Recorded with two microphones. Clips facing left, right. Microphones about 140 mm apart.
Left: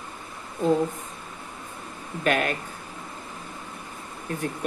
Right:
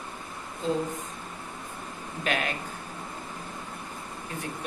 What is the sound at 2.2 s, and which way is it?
Speech, 50° left (ahead or behind).